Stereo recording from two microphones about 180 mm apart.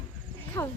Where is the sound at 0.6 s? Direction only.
15° left (ahead or behind).